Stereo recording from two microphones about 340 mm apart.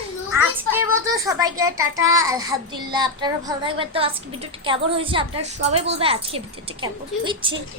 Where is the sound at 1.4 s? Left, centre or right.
Centre.